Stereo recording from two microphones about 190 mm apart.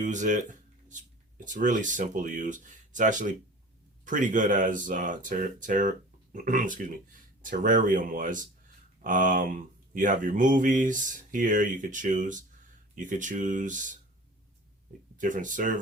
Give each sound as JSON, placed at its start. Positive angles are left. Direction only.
{"t": 0.0, "sound": "speech", "side_deg": -40}
{"t": 15.2, "sound": "speech", "side_deg": -45}